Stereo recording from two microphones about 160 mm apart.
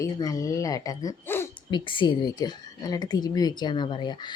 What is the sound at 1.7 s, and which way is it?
Speech, 30° left (ahead or behind).